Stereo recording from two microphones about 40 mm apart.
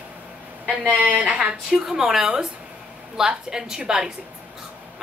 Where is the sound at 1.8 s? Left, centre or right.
Centre.